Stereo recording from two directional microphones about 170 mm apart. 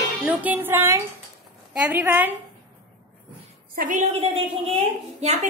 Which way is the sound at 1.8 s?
10° right (ahead or behind).